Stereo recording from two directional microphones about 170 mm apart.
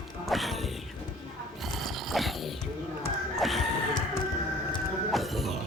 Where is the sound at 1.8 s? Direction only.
Centre (ahead or behind).